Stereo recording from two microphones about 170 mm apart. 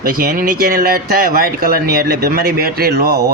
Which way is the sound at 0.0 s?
60° right (ahead or behind).